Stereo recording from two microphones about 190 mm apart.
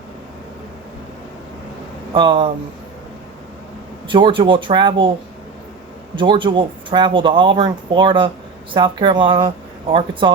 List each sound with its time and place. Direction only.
2.1 s speech: 25° right (ahead or behind)
4.1 s speech: 25° right (ahead or behind)
6.1 s speech: 25° right (ahead or behind)